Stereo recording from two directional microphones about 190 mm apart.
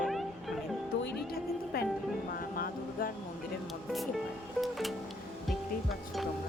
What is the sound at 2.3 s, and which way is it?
Vehicle, 50° left (ahead or behind).